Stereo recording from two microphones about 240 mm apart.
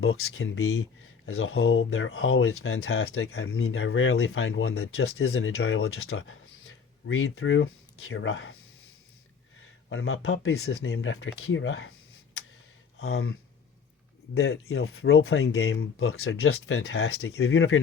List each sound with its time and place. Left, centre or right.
0.0 s speech: left
9.9 s speech: left
14.3 s speech: left